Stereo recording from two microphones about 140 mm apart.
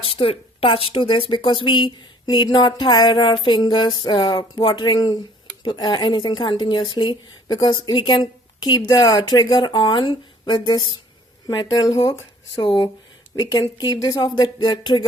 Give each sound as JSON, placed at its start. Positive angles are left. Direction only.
{"t": 0.0, "sound": "a woman's voice", "side_deg": 40}